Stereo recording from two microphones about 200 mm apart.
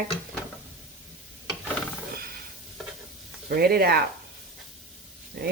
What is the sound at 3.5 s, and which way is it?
Speech, 50° right (ahead or behind).